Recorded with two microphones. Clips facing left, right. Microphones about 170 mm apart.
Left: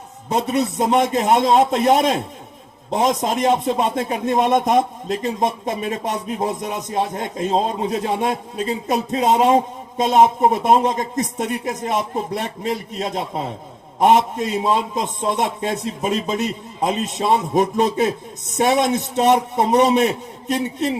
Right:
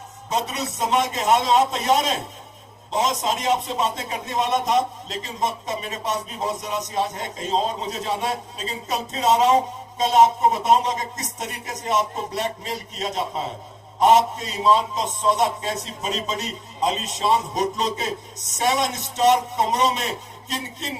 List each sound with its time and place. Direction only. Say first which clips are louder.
0.3 s speech: left 7 dB; 55° left (ahead or behind)